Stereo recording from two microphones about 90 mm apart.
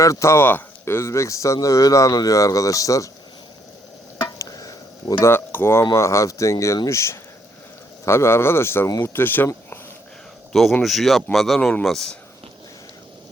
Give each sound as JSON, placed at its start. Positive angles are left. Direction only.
{"t": 0.0, "sound": "speech", "side_deg": 35}
{"t": 4.4, "sound": "a sound", "side_deg": 40}
{"t": 5.2, "sound": "speech", "side_deg": 25}
{"t": 10.5, "sound": "speech", "side_deg": 0}